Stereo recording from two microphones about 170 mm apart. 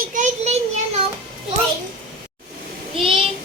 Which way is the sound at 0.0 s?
50° right (ahead or behind).